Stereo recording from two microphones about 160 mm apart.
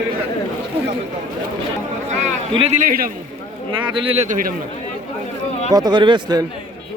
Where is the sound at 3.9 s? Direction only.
35° right (ahead or behind).